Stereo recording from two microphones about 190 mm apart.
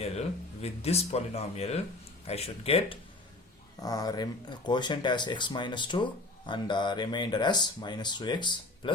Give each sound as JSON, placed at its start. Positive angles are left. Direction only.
{"t": 0.0, "sound": "speech", "side_deg": 35}
{"t": 3.8, "sound": "speech", "side_deg": 20}